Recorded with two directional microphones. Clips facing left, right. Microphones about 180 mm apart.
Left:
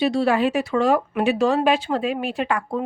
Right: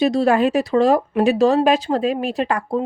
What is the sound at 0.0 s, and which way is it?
A woman's voice, 40° right (ahead or behind).